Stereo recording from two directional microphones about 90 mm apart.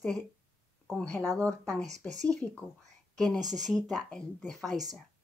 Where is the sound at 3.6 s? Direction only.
Centre (ahead or behind).